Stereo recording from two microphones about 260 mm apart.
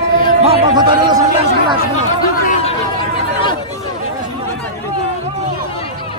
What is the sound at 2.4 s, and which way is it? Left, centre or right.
Chatter, left.